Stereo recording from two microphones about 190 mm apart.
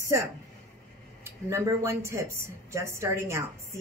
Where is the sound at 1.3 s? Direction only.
15° right (ahead or behind).